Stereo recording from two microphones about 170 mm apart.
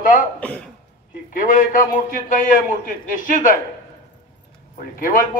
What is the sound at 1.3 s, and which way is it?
A man's voice, 55° left (ahead or behind).